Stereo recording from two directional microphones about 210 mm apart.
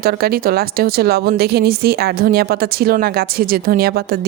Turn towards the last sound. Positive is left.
turn(degrees=-45)  # may be behind; listen again after turning